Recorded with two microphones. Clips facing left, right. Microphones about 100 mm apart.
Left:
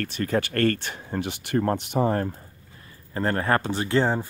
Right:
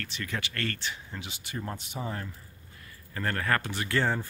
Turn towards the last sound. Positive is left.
turn(degrees=20)  # may be behind; listen again after turning